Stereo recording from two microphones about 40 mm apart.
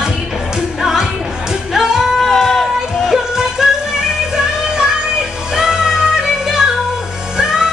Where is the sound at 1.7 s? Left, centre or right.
Centre.